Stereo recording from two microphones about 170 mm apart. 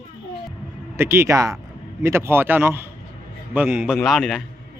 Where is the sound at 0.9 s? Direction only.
15° right (ahead or behind).